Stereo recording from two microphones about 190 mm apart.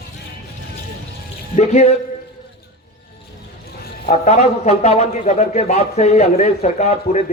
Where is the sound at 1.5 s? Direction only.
35° left (ahead or behind).